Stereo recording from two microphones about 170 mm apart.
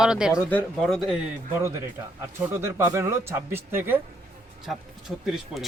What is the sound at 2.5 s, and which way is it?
Speech, 15° right (ahead or behind).